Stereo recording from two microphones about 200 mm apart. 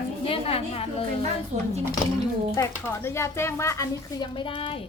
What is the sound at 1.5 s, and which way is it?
Speech, 35° right (ahead or behind).